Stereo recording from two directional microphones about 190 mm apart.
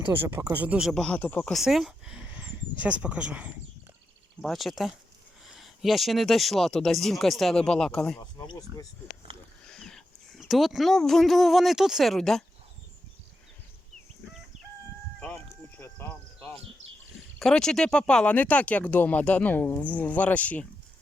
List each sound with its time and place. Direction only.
0.1 s speech: 10° right (ahead or behind)
8.4 s speech: 20° left (ahead or behind)
9.3 s a sound: 30° right (ahead or behind)
9.6 s speech: 5° left (ahead or behind)
15.8 s cricket: 10° left (ahead or behind)
17.4 s speech: 5° left (ahead or behind)